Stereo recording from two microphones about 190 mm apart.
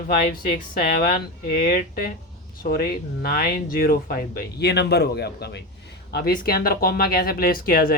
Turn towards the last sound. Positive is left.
turn(degrees=50)  # may be behind; listen again after turning